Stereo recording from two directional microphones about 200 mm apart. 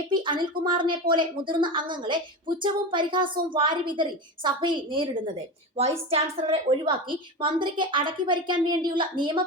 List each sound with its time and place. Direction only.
0.1 s a sound: 25° right (ahead or behind)
0.6 s a woman's voice: 25° right (ahead or behind)
6.1 s a woman's voice: 30° right (ahead or behind)